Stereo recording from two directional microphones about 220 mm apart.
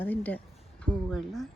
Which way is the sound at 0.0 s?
10° left (ahead or behind).